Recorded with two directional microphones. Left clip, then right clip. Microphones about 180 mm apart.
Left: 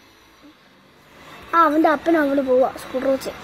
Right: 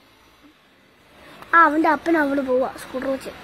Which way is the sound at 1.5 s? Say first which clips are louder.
Even; 10° right (ahead or behind).